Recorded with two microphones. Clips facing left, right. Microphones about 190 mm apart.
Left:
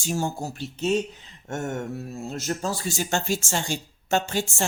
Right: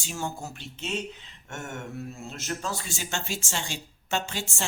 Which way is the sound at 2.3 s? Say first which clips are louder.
Left 5 dB; 40° left (ahead or behind).